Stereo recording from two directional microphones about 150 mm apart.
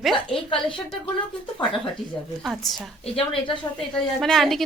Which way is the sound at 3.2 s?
35° left (ahead or behind).